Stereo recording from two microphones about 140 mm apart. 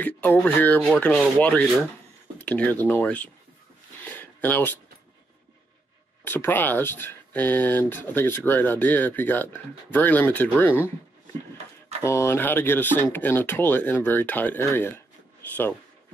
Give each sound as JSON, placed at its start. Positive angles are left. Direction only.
{"t": 0.0, "sound": "speech", "side_deg": 10}
{"t": 4.0, "sound": "a sound", "side_deg": 10}
{"t": 6.2, "sound": "speech", "side_deg": 15}
{"t": 12.0, "sound": "speech", "side_deg": 20}